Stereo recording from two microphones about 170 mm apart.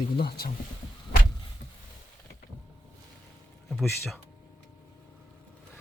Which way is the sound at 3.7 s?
Centre (ahead or behind).